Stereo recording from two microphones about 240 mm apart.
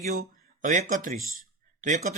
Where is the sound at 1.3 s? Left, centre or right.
Right.